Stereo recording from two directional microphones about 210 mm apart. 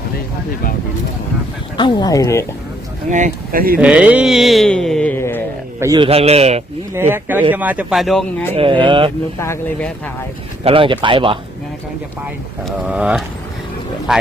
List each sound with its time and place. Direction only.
1.7 s speech: 20° left (ahead or behind)
3.1 s speech: 35° right (ahead or behind)
3.8 s speech: 5° right (ahead or behind); by 5.4 s 10° left (ahead or behind)
5.8 s speech: 15° right (ahead or behind)
6.1 s speech: 30° right (ahead or behind)
6.9 s speech: 10° right (ahead or behind); by 8.5 s 5° left (ahead or behind)
8.5 s speech: 25° right (ahead or behind)
9.4 s speech: 10° left (ahead or behind)
10.6 s speech: 25° right (ahead or behind)
12.2 s speech: 5° right (ahead or behind)